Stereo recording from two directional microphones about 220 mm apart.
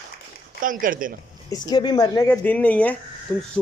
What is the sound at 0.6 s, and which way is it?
Speech, 40° right (ahead or behind).